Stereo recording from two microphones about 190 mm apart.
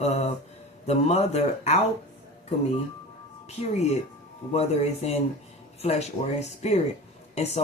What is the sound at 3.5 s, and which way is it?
Speech, 35° left (ahead or behind).